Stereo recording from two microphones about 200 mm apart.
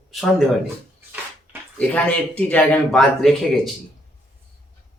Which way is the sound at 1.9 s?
5° left (ahead or behind).